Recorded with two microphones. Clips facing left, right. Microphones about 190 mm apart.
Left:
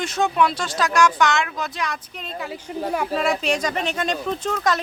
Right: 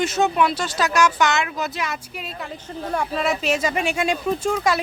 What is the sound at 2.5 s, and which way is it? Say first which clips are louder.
Speech: left 2 dB; 10° left (ahead or behind).